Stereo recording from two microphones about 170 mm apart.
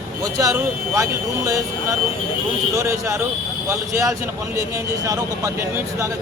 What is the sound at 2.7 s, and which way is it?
Speech, 15° right (ahead or behind).